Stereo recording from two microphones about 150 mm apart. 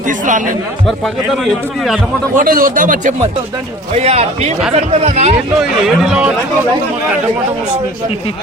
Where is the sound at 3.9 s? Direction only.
45° right (ahead or behind).